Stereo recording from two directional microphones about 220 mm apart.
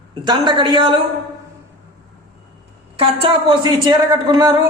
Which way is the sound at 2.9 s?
25° right (ahead or behind).